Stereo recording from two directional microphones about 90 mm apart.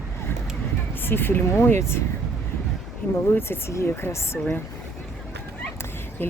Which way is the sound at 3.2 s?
25° left (ahead or behind).